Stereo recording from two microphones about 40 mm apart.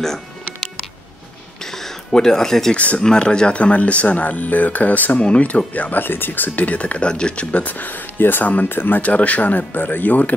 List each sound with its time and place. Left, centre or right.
1.6 s a sound: centre
2.7 s speech: left
3.0 s speech: centre
3.5 s speech: left
5.2 s speech: left
5.7 s speech: left
7.6 s speech: left
8.6 s speech: left
9.0 s speech: left